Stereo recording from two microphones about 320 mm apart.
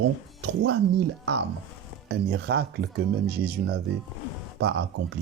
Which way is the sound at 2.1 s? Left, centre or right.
Right.